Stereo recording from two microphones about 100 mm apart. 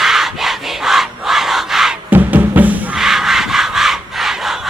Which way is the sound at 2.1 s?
20° right (ahead or behind).